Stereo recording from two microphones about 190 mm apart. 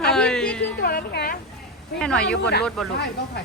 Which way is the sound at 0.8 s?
50° left (ahead or behind).